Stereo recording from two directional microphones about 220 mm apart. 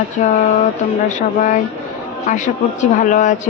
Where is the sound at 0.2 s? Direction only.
35° left (ahead or behind).